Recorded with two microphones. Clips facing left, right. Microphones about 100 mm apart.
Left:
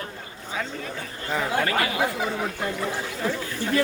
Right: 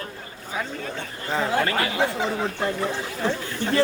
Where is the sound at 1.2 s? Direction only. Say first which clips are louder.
Right 2 dB; 35° right (ahead or behind).